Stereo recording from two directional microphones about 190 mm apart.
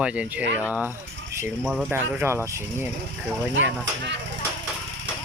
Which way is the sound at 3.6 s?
80° right.